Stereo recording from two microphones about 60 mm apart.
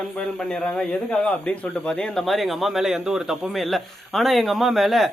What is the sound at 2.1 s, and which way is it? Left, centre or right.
A man's voice, centre.